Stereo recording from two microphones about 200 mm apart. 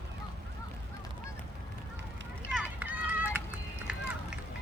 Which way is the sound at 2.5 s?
5° right (ahead or behind).